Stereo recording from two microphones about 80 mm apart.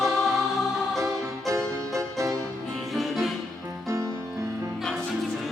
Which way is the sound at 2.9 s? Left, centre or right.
Centre.